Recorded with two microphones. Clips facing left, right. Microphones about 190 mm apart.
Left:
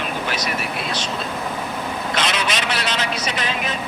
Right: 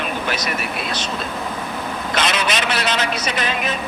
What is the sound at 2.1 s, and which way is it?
Vehicle, 55° right (ahead or behind).